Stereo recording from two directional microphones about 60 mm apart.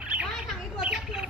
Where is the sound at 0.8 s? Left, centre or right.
Centre.